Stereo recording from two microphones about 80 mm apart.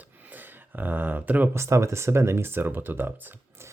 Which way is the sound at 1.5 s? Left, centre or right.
Right.